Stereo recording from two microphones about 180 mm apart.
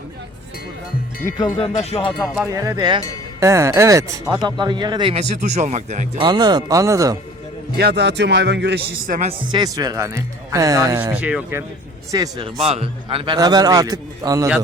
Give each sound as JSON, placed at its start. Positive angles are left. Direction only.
{"t": 1.2, "sound": "speech", "side_deg": 25}
{"t": 1.7, "sound": "music", "side_deg": 35}
{"t": 2.2, "sound": "speech", "side_deg": -5}
{"t": 2.5, "sound": "a man's voice", "side_deg": -20}
{"t": 5.3, "sound": "speech", "side_deg": -40}
{"t": 6.2, "sound": "a man's voice", "side_deg": -25}
{"t": 7.8, "sound": "a man's voice", "side_deg": -65}
{"t": 9.5, "sound": "speech", "side_deg": -20}
{"t": 12.1, "sound": "a man's voice", "side_deg": -25}